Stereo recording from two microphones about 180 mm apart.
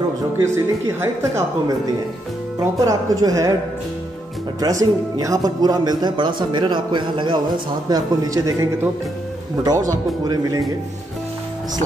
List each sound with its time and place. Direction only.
0.4 s speech: 15° right (ahead or behind)
2.8 s speech: 20° right (ahead or behind)
4.6 s speech: 20° right (ahead or behind)